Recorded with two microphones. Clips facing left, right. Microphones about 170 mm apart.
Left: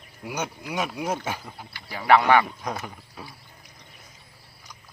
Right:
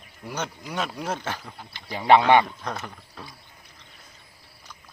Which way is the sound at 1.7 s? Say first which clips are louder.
Right 1 dB; 20° right (ahead or behind).